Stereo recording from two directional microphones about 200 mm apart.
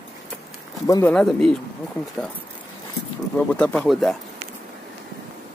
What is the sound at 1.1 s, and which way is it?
Speech, centre (ahead or behind).